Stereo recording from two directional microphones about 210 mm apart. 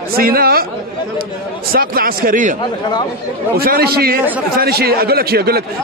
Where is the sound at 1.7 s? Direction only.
45° right (ahead or behind).